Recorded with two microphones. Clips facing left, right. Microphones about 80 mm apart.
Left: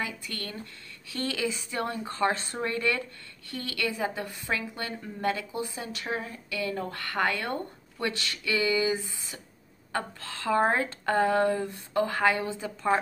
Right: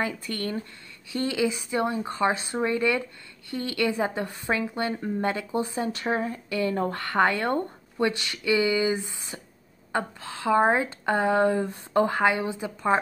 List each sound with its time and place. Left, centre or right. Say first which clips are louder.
0.3 s speech: right 8 dB; right